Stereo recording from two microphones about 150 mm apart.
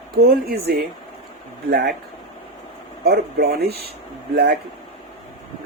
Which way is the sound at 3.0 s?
90° right.